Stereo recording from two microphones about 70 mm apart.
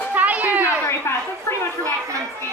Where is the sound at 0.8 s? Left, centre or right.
Left.